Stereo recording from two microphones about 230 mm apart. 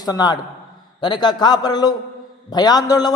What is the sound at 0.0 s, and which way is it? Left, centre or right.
A man's voice, centre.